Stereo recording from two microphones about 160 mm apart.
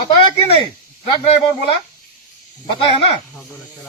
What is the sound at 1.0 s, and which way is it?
Speech, 35° left (ahead or behind).